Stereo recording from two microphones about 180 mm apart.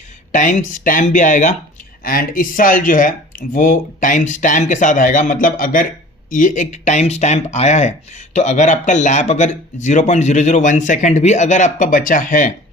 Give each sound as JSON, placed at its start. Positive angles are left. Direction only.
{"t": 0.3, "sound": "speech", "side_deg": 45}